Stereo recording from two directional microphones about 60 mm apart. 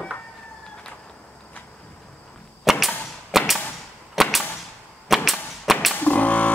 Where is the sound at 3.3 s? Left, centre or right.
Centre.